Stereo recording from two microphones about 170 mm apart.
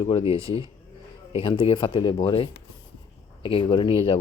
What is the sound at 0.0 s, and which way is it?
Speech, 35° left (ahead or behind).